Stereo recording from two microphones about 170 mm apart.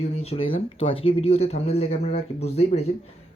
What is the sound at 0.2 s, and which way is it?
Speech, 35° left (ahead or behind).